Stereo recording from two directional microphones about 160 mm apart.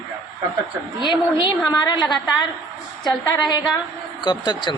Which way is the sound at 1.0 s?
25° left (ahead or behind).